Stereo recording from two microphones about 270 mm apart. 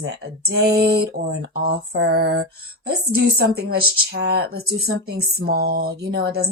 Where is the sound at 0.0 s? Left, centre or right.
Right.